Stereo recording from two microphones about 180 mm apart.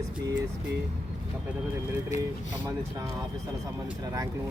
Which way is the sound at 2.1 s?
40° left (ahead or behind).